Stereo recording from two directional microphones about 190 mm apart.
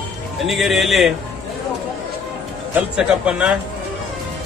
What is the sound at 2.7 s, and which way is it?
Speech, 5° right (ahead or behind).